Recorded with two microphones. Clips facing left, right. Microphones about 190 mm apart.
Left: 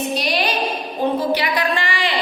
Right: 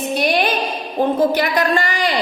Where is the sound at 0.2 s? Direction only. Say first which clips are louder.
Right 4 dB; 55° right (ahead or behind).